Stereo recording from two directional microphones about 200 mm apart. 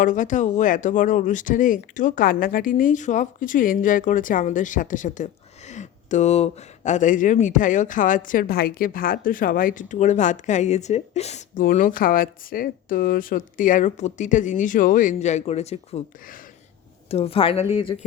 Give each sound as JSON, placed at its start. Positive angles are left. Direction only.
{"t": 0.0, "sound": "speech", "side_deg": 40}
{"t": 17.1, "sound": "speech", "side_deg": 30}